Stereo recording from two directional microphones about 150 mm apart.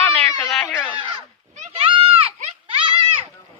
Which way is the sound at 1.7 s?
35° right (ahead or behind).